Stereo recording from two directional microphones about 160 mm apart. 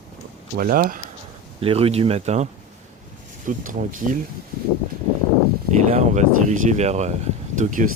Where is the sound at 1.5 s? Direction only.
35° right (ahead or behind).